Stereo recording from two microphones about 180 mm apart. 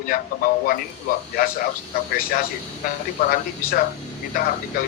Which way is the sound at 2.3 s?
55° left (ahead or behind).